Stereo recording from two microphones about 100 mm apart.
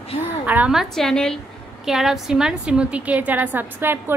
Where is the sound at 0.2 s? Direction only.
15° right (ahead or behind).